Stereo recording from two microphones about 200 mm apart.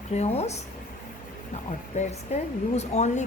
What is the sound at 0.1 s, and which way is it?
Speech, 35° left (ahead or behind).